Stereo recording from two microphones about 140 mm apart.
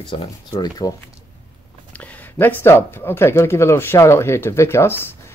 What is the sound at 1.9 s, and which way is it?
Speech, 10° left (ahead or behind).